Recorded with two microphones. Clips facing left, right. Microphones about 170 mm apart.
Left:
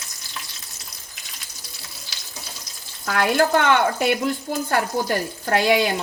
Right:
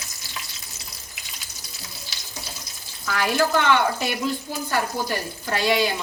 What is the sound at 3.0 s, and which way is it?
Speech, 55° left (ahead or behind).